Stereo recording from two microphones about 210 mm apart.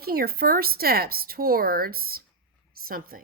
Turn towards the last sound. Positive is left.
turn(degrees=-45)  # may be behind; listen again after turning